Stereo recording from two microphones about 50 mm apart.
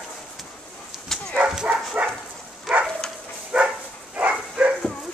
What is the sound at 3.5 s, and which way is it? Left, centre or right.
Dog, right.